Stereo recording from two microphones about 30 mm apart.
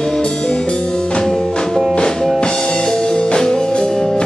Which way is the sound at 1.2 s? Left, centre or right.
Left.